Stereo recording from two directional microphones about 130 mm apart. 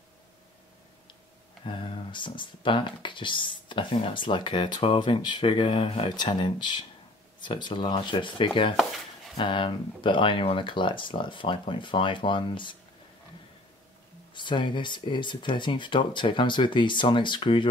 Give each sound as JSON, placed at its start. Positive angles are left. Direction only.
{"t": 1.6, "sound": "speech", "side_deg": 40}
{"t": 14.3, "sound": "speech", "side_deg": 40}